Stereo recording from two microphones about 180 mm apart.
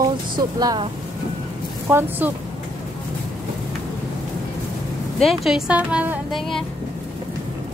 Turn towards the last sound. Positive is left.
turn(degrees=-10)  # may be behind; listen again after turning